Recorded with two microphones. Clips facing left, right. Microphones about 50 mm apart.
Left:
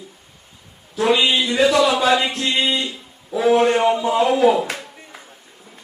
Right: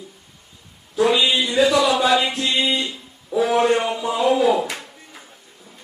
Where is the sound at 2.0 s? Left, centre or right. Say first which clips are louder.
Left 1 dB; left.